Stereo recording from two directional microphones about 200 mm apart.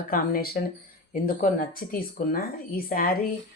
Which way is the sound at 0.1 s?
45° left (ahead or behind).